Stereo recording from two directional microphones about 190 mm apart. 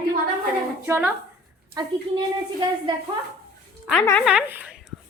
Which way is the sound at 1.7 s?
25° right (ahead or behind).